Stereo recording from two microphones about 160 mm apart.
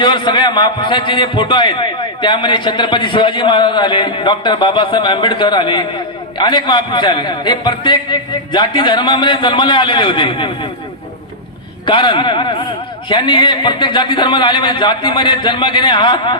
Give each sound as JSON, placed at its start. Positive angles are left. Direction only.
{"t": 0.0, "sound": "a man's voice", "side_deg": 30}
{"t": 11.9, "sound": "a man's voice", "side_deg": 30}